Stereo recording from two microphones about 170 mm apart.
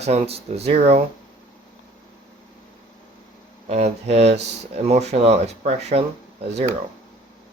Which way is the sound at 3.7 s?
40° right (ahead or behind).